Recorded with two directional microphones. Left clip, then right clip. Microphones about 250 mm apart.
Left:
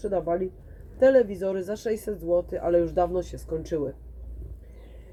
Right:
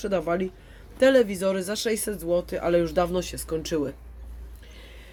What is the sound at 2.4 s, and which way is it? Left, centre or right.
Speech, right.